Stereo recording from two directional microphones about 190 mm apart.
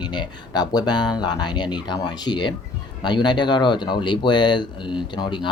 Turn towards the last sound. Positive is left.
turn(degrees=25)  # may be behind; listen again after turning